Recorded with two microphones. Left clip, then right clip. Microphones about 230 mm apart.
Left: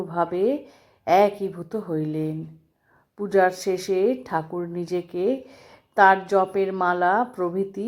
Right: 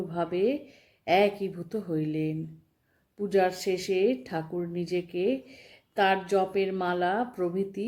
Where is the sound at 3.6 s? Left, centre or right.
Left.